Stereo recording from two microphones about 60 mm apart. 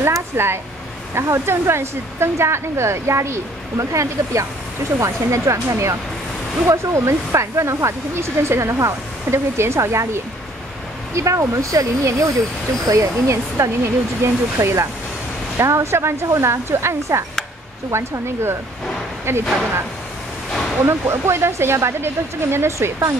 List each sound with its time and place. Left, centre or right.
0.0 s a sound: right
1.1 s speech: right
11.1 s speech: right
13.6 s speech: right
20.8 s speech: right